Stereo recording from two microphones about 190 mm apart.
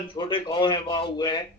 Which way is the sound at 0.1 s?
25° left (ahead or behind).